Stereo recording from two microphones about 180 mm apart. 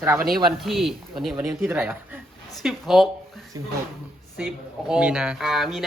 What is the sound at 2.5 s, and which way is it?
Speech, centre (ahead or behind).